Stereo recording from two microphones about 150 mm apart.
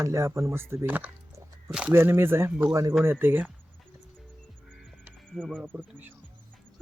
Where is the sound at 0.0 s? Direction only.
20° right (ahead or behind).